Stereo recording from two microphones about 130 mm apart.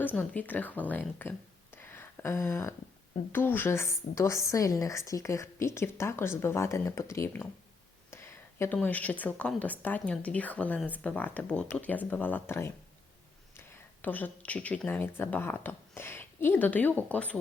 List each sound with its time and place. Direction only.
0.0 s speech: 15° left (ahead or behind)
1.7 s a sound: 15° left (ahead or behind)
3.3 s a woman's voice: 15° left (ahead or behind)
14.0 s speech: 15° left (ahead or behind)